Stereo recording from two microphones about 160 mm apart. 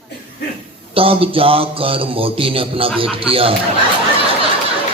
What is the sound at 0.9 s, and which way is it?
Speech, 35° right (ahead or behind).